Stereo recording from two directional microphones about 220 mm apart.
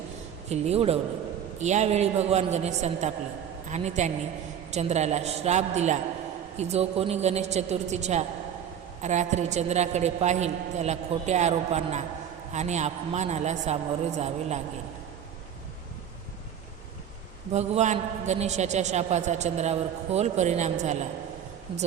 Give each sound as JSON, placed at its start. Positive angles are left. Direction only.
{"t": 0.4, "sound": "a woman's voice", "side_deg": -30}
{"t": 17.5, "sound": "a man's voice", "side_deg": -30}